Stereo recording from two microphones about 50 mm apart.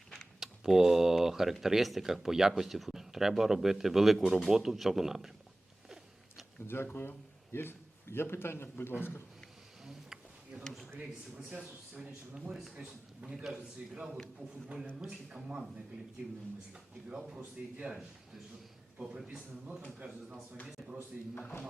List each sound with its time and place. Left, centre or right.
0.3 s speech: centre
6.8 s a man's voice: left
9.8 s a sound: centre
10.6 s speech: centre
11.5 s speech: right
12.5 s speech: centre
12.7 s a man's voice: right
16.7 s speech: centre
19.0 s speech: centre
20.0 s speech: right